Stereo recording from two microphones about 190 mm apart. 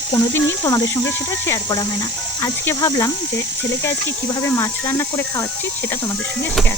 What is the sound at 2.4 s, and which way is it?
Speech, 15° left (ahead or behind).